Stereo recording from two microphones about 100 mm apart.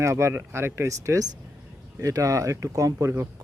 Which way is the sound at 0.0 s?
30° right (ahead or behind).